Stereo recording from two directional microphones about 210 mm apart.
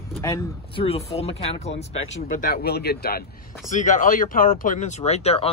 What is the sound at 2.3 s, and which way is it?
Speech, 45° left (ahead or behind).